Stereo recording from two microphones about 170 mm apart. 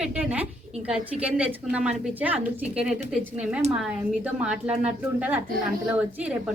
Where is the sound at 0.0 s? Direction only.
5° right (ahead or behind).